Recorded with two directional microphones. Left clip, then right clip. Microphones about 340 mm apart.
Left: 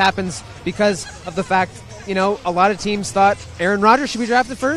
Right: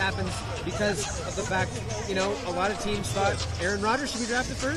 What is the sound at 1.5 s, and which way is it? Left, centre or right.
A man's voice, left.